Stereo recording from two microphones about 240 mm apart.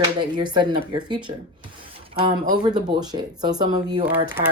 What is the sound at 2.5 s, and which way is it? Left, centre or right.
Speech, centre.